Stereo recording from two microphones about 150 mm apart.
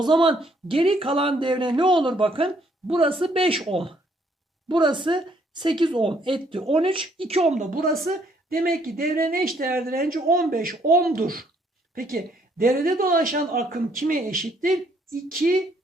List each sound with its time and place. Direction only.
0.0 s a woman's voice: 30° right (ahead or behind); by 15.5 s 70° right (ahead or behind)